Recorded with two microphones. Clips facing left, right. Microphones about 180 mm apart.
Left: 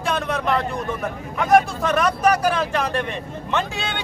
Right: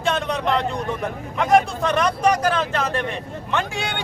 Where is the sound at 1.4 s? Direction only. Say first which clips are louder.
Left 1 dB; centre (ahead or behind).